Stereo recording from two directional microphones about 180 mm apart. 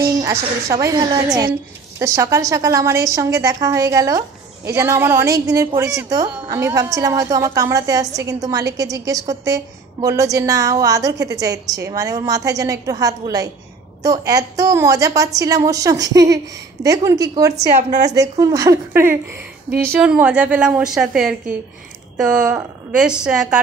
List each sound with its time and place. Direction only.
0.0 s a woman's voice: 20° right (ahead or behind)
17.6 s a woman's voice: 40° right (ahead or behind)
18.4 s a woman's voice: 20° right (ahead or behind)